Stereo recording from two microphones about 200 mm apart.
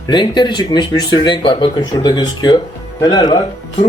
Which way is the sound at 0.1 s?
20° left (ahead or behind).